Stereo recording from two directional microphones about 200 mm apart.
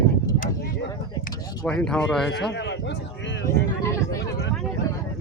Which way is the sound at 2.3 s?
65° left (ahead or behind).